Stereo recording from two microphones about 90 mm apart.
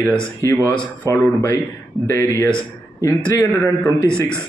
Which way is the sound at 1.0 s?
35° left (ahead or behind).